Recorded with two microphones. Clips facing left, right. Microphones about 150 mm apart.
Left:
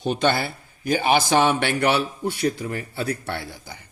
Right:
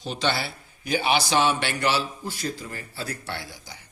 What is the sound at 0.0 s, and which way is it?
A man's voice, 55° left (ahead or behind).